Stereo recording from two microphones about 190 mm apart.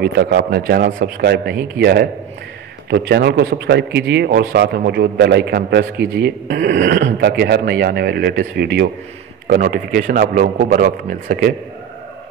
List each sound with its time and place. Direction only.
0.0 s a man's voice: 60° right (ahead or behind)